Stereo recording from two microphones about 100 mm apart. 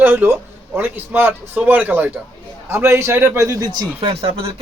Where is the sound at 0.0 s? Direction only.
20° right (ahead or behind).